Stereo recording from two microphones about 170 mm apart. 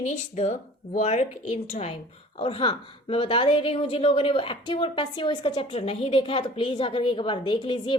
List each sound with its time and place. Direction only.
0.0 s a woman's voice: 40° left (ahead or behind)